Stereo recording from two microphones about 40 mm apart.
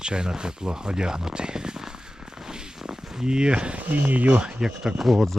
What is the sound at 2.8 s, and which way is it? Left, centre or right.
Speech, right.